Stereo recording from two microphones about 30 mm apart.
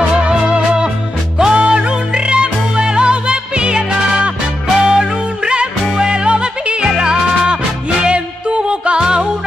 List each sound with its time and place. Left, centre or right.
0.1 s music: right